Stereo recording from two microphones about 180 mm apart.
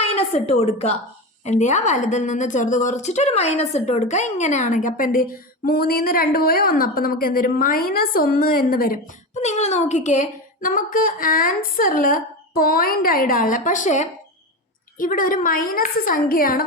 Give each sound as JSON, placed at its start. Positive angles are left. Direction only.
{"t": 0.0, "sound": "a woman's voice", "side_deg": 35}
{"t": 9.4, "sound": "a woman's voice", "side_deg": 40}